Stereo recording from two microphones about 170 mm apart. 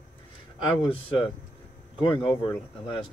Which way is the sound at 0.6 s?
30° left (ahead or behind).